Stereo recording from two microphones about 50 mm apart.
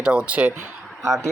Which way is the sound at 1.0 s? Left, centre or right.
Right.